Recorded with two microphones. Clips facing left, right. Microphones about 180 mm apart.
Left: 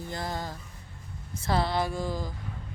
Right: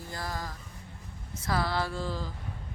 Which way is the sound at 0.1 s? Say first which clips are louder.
Left 2 dB; 25° left (ahead or behind).